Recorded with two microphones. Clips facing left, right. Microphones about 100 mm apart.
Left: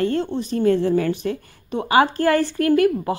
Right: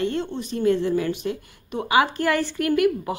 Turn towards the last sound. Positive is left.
turn(degrees=35)  # may be behind; listen again after turning